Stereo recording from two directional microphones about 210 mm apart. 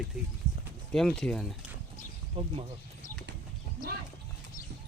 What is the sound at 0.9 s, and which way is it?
Speech, centre (ahead or behind).